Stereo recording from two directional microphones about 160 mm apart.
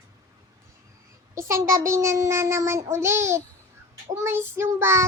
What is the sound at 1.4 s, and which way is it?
Child singing, 15° right (ahead or behind).